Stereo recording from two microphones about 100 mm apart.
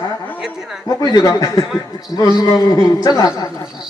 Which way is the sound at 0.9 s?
40° left (ahead or behind).